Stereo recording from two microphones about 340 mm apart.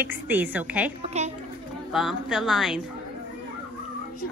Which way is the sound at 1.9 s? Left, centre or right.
Centre.